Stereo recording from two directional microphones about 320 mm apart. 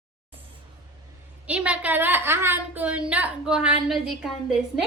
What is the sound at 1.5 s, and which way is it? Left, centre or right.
A woman's voice, centre.